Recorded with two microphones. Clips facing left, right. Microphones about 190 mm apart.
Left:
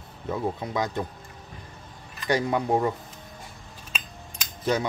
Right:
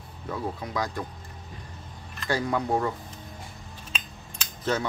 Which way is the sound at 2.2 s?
20° left (ahead or behind).